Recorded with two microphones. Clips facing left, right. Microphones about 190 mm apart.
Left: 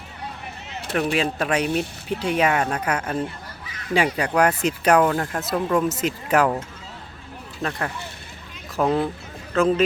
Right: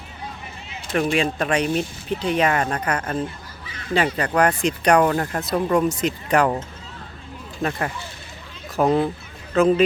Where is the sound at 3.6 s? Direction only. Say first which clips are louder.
Right 1 dB; 30° right (ahead or behind).